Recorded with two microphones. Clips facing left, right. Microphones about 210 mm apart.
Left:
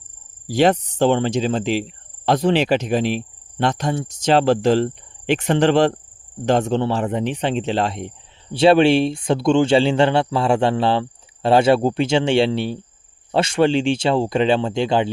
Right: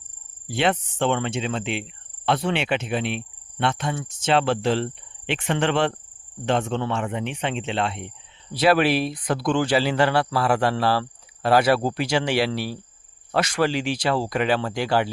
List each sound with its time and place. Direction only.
0.4 s cricket: 40° left (ahead or behind)
6.4 s speech: 40° left (ahead or behind); by 15.1 s 20° left (ahead or behind)